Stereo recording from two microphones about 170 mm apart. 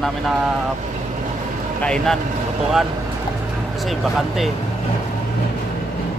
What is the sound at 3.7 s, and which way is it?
Speech, centre (ahead or behind).